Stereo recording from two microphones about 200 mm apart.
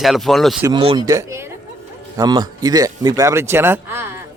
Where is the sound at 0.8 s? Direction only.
30° right (ahead or behind).